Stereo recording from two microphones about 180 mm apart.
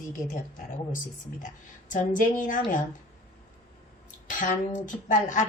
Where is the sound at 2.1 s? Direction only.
45° left (ahead or behind).